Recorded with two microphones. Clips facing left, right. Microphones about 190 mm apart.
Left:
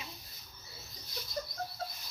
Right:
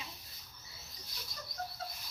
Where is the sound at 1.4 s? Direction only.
45° left (ahead or behind).